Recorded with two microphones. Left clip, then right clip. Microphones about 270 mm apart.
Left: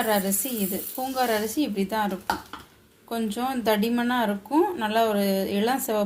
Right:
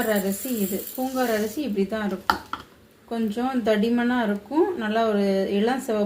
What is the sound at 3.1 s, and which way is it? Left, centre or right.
Speech, left.